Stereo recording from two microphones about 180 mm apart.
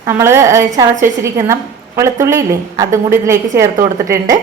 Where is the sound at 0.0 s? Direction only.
15° right (ahead or behind).